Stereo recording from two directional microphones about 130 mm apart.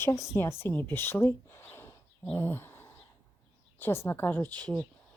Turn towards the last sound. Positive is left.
turn(degrees=15)  # may be behind; listen again after turning